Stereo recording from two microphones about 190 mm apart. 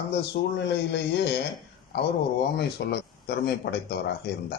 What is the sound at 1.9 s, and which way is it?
Speech, 60° left (ahead or behind).